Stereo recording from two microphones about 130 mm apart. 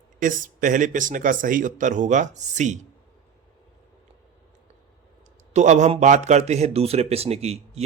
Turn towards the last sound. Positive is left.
turn(degrees=-55)  # may be behind; listen again after turning